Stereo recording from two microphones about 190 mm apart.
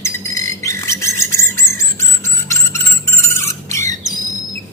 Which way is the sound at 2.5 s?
15° left (ahead or behind).